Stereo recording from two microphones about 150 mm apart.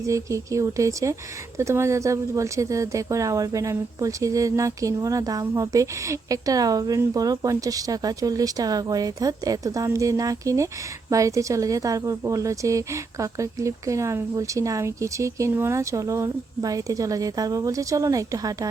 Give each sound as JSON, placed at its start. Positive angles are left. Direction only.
{"t": 0.0, "sound": "speech", "side_deg": -20}